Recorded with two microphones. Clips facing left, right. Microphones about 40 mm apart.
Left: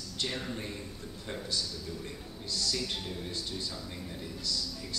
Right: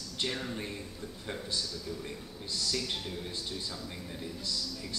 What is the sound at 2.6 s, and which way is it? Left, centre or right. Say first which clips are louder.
Speech: right 1 dB; centre.